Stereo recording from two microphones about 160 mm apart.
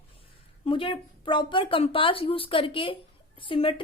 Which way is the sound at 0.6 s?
35° left (ahead or behind).